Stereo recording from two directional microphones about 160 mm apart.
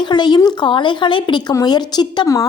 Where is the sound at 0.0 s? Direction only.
25° left (ahead or behind).